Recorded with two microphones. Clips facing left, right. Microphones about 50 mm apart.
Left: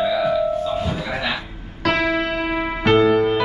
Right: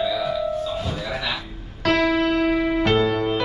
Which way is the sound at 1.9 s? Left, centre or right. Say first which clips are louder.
Right 2 dB; centre.